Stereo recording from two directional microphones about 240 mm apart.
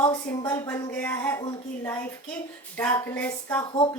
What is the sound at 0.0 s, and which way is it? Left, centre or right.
A woman's voice, centre.